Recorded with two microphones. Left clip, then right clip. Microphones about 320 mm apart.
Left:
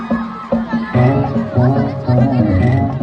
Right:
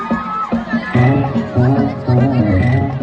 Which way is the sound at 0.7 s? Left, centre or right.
Left.